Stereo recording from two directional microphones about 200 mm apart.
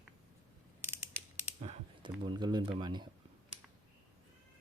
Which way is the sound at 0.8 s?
10° right (ahead or behind).